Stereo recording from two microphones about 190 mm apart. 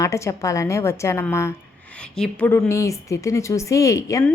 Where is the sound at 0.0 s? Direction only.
15° left (ahead or behind).